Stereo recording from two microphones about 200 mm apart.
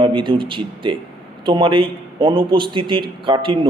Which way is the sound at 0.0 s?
25° right (ahead or behind).